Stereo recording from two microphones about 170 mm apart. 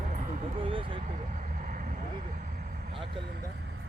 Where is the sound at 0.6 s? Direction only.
30° right (ahead or behind).